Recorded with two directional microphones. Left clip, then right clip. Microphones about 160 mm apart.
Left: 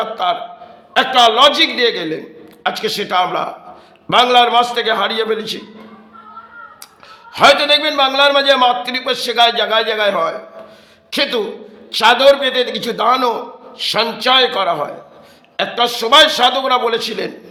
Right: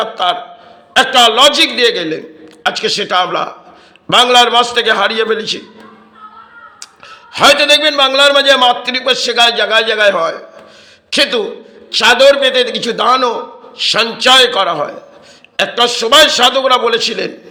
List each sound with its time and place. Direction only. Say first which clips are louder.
0.0 s a sound: right 3 dB; 10° right (ahead or behind)
0.9 s a man's voice: right 3 dB; 10° right (ahead or behind)
7.3 s a man's voice: right 2 dB; 5° right (ahead or behind)